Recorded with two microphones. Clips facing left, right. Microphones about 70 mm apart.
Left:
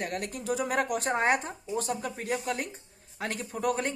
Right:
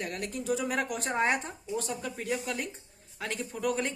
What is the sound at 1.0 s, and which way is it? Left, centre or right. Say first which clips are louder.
A woman's voice: left 2 dB; left.